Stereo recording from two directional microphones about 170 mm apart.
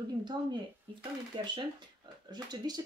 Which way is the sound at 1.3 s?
30° right (ahead or behind).